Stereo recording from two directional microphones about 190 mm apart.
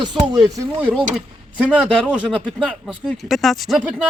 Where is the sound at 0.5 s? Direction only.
10° right (ahead or behind).